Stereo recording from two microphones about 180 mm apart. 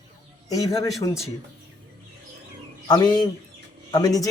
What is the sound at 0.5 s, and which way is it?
Speech, 20° left (ahead or behind).